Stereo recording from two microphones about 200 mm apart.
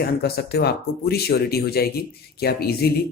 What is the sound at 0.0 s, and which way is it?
Speech, 50° left (ahead or behind).